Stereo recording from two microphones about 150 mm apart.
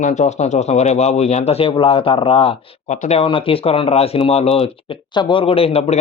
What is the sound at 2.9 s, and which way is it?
Speech, 50° left (ahead or behind).